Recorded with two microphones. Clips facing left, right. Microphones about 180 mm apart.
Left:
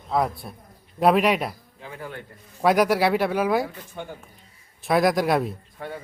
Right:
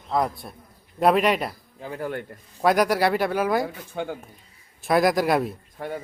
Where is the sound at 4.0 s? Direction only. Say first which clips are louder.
Right 6 dB; 90° right.